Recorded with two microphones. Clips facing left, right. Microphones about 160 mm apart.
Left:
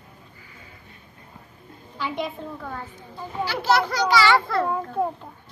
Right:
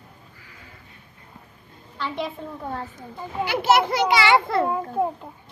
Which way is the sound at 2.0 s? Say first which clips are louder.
Even; centre (ahead or behind).